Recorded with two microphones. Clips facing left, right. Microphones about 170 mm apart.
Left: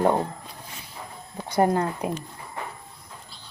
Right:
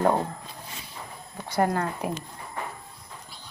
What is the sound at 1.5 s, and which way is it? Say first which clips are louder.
Speech: left 3 dB; 20° left (ahead or behind).